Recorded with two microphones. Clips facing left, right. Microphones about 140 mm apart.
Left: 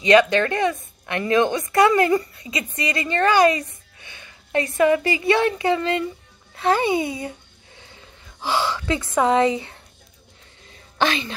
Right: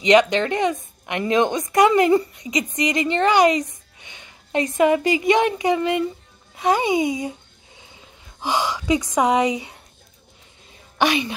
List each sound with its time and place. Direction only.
0.0 s a woman's voice: 20° right (ahead or behind)
11.0 s a woman's voice: 15° right (ahead or behind)